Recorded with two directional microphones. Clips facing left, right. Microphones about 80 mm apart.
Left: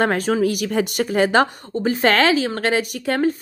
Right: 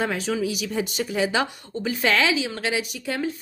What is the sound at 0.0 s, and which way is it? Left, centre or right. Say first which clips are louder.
Speech: left 7 dB; left.